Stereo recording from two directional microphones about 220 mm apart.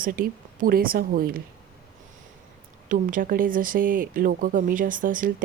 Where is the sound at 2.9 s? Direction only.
40° right (ahead or behind).